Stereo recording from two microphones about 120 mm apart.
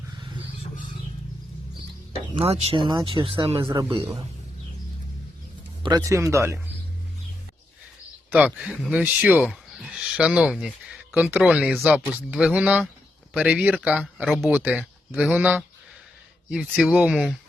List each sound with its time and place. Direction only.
2.3 s speech: 55° right (ahead or behind)
2.7 s speech: 40° right (ahead or behind)
6.1 s speech: 25° right (ahead or behind)
8.3 s speech: 10° right (ahead or behind)
9.4 s speech: centre (ahead or behind)
16.8 s speech: 10° right (ahead or behind)